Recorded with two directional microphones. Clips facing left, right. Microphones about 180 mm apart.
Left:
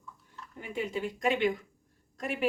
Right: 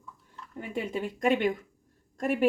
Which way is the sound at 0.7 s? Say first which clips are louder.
Right 1 dB; 50° right (ahead or behind).